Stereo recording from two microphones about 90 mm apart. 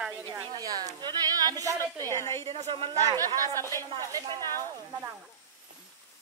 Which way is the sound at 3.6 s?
30° left (ahead or behind).